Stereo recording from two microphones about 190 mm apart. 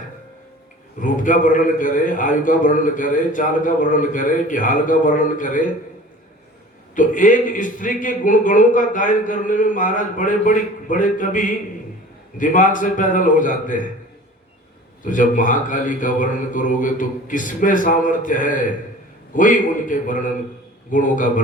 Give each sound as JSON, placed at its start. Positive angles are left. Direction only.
{"t": 0.9, "sound": "a man's voice", "side_deg": 45}
{"t": 6.9, "sound": "a man's voice", "side_deg": 45}
{"t": 15.0, "sound": "a man's voice", "side_deg": 45}